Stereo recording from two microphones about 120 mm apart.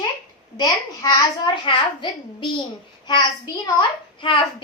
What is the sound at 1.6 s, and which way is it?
A woman's voice, 40° left (ahead or behind).